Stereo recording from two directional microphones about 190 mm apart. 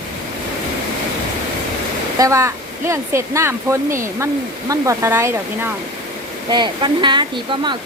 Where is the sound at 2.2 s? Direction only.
15° right (ahead or behind).